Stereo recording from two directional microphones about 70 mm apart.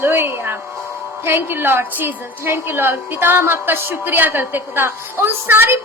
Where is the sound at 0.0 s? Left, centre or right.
Right.